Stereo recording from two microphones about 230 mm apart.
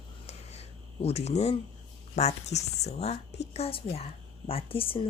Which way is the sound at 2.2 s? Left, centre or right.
Left.